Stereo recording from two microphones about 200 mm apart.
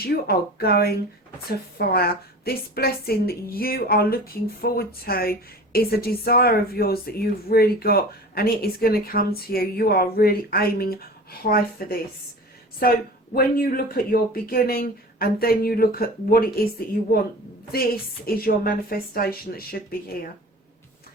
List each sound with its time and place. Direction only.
0.0 s speech: 50° left (ahead or behind)
18.3 s speech: 50° left (ahead or behind)